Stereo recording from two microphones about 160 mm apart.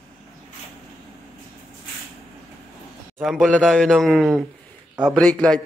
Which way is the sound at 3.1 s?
5° right (ahead or behind).